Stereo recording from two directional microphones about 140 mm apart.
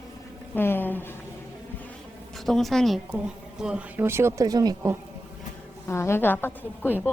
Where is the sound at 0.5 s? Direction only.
15° left (ahead or behind).